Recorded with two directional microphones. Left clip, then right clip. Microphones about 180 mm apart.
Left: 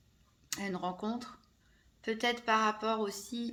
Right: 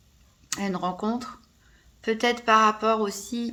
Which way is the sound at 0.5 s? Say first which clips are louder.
Right 8 dB; 20° right (ahead or behind).